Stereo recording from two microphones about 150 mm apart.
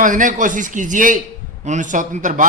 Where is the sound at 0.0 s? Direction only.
60° right (ahead or behind).